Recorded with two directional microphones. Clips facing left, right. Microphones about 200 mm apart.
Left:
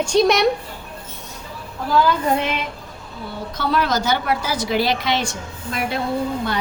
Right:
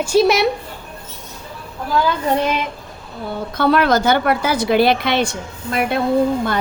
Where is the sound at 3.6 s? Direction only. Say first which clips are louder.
Right 6 dB; 60° right (ahead or behind).